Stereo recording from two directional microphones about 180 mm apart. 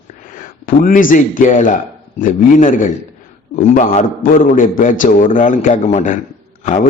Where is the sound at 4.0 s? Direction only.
50° left (ahead or behind).